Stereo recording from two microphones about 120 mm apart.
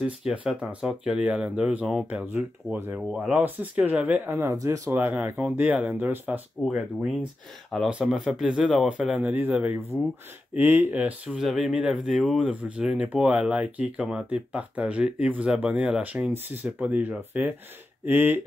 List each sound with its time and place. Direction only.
0.3 s speech: 10° right (ahead or behind)
4.3 s speech: 25° right (ahead or behind)
4.9 s speech: 10° right (ahead or behind)